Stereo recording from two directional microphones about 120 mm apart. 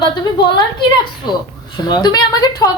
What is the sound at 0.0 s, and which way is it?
Speech, 40° left (ahead or behind).